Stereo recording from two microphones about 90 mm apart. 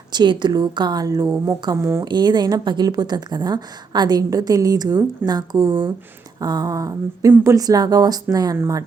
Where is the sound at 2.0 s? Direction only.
55° right (ahead or behind).